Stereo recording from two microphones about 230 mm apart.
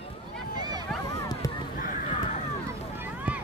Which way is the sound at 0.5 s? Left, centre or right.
Centre.